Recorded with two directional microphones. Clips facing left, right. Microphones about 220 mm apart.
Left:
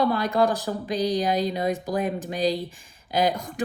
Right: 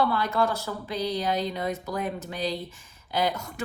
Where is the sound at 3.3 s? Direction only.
35° left (ahead or behind).